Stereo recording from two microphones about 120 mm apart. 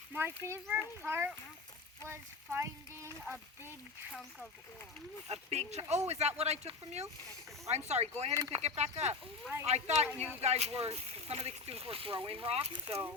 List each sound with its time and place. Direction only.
0.1 s a child's voice: 20° right (ahead or behind)
5.3 s speech: 65° right (ahead or behind)
8.3 s speech: 30° right (ahead or behind)
8.5 s speech: 60° right (ahead or behind)